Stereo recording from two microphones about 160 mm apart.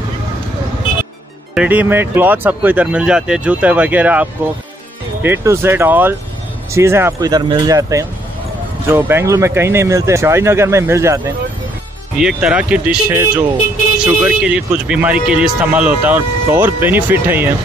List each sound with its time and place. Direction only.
1.5 s speech: 10° right (ahead or behind)
12.2 s speech: 5° right (ahead or behind)